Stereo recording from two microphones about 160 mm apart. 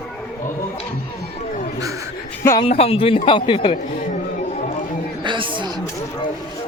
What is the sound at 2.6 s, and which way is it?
A woman's voice, 40° left (ahead or behind).